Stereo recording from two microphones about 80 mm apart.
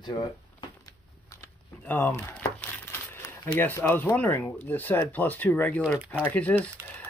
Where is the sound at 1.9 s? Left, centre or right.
Left.